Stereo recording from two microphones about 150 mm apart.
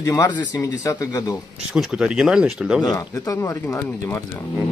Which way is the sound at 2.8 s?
25° left (ahead or behind).